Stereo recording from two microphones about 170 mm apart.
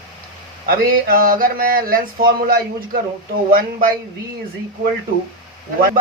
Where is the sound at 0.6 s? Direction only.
60° right (ahead or behind).